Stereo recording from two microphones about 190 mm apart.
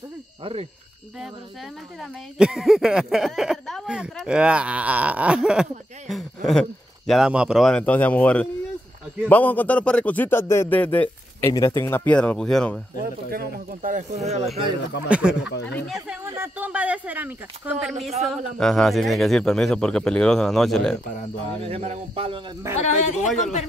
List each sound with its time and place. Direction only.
0.4 s cricket: 30° right (ahead or behind)
2.0 s speech: centre (ahead or behind)
13.0 s speech: 50° right (ahead or behind); by 14.7 s 35° right (ahead or behind)
15.0 s speech: 5° right (ahead or behind)
15.4 s speech: 65° left (ahead or behind)
16.3 s speech: 10° right (ahead or behind)
21.6 s speech: 30° right (ahead or behind)
22.8 s speech: 40° left (ahead or behind)